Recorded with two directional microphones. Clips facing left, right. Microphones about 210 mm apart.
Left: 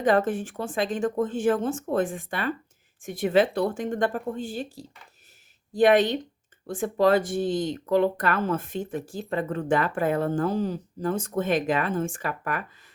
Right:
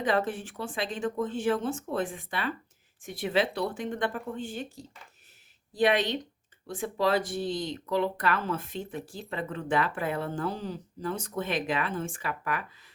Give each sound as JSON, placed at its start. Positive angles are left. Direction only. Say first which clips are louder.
{"t": 0.0, "sound": "speech", "louder": "left 6 dB", "side_deg": 50}
{"t": 5.7, "sound": "speech", "louder": "left 6 dB", "side_deg": 50}